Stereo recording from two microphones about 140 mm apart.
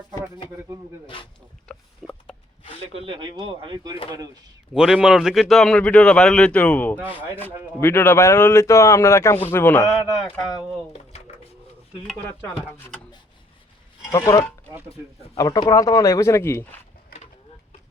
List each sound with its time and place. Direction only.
0.1 s a sound: 30° left (ahead or behind)
1.0 s speech: 35° left (ahead or behind)
1.6 s pig: 5° left (ahead or behind)
2.9 s speech: 40° right (ahead or behind)
4.7 s speech: 5° right (ahead or behind); by 9.8 s 15° left (ahead or behind)
14.1 s a man's voice: 20° left (ahead or behind)